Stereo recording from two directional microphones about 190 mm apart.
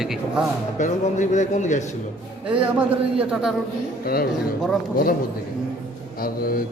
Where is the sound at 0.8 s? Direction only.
40° left (ahead or behind).